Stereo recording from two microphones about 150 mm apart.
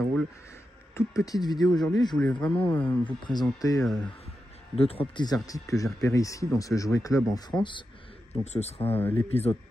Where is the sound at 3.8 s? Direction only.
5° left (ahead or behind).